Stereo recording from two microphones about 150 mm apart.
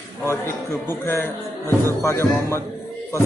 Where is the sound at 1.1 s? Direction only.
15° left (ahead or behind).